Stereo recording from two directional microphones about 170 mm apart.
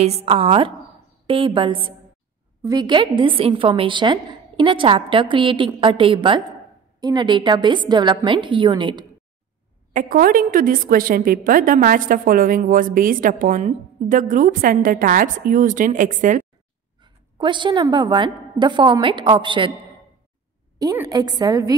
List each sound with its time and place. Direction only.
0.0 s a woman's voice: 35° right (ahead or behind)
9.9 s a woman's voice: 55° right (ahead or behind)
17.0 s a woman's voice: 25° right (ahead or behind)
20.8 s a woman's voice: 20° right (ahead or behind)